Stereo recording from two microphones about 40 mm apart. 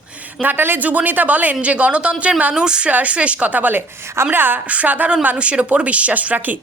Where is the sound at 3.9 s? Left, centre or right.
Right.